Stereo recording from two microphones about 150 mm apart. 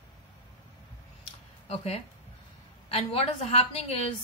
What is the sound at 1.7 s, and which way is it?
Speech, 40° left (ahead or behind).